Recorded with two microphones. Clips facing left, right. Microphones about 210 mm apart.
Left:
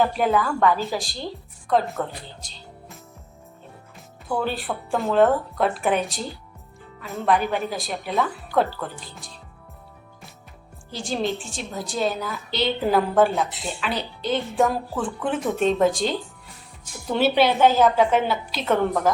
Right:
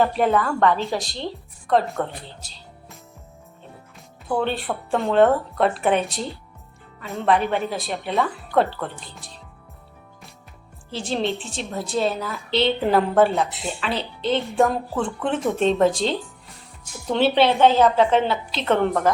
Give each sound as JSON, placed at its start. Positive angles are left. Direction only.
{"t": 0.0, "sound": "a woman's voice", "side_deg": 0}
{"t": 4.4, "sound": "a woman's voice", "side_deg": 0}
{"t": 10.9, "sound": "a woman's voice", "side_deg": 0}